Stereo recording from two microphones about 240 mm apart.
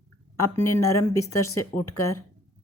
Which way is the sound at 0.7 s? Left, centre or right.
Centre.